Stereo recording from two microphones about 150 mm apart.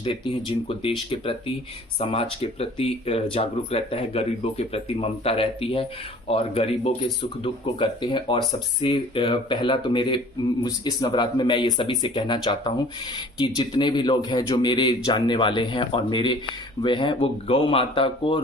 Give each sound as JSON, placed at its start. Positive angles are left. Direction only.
{"t": 0.0, "sound": "speech", "side_deg": 35}